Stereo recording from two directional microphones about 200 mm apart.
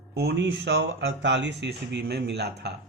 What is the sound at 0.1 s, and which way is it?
A man's voice, 55° right (ahead or behind).